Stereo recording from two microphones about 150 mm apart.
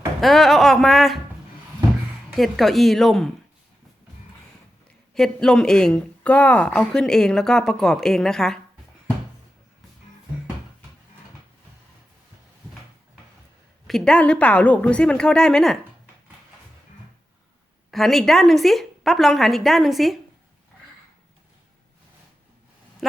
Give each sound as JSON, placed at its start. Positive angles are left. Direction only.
{"t": 0.2, "sound": "speech", "side_deg": 0}
{"t": 2.3, "sound": "speech", "side_deg": 0}
{"t": 5.1, "sound": "speech", "side_deg": 5}
{"t": 13.8, "sound": "a woman's voice", "side_deg": 5}
{"t": 17.9, "sound": "speech", "side_deg": 0}